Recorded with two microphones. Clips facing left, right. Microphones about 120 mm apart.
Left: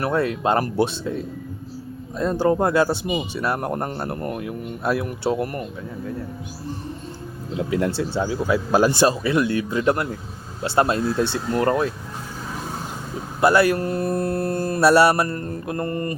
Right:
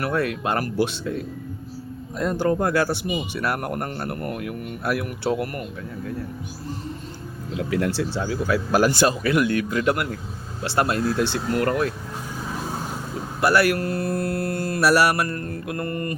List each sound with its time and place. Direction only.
0.0 s speech: 25° left (ahead or behind)
2.1 s speech: 25° left (ahead or behind)
7.5 s speech: 20° left (ahead or behind)
13.4 s speech: 25° left (ahead or behind)